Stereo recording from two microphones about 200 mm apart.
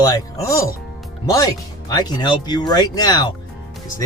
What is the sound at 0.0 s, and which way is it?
Speech, 15° left (ahead or behind).